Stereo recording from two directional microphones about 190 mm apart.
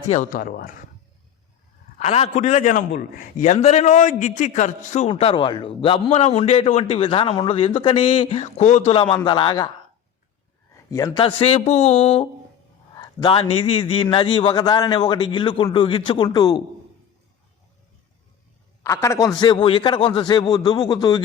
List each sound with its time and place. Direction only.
0.1 s speech: 45° left (ahead or behind)
2.0 s a man's voice: 35° left (ahead or behind)
10.9 s a man's voice: 20° left (ahead or behind)
18.8 s a man's voice: 15° left (ahead or behind)